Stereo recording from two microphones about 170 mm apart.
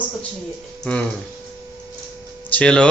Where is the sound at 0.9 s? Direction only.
5° left (ahead or behind).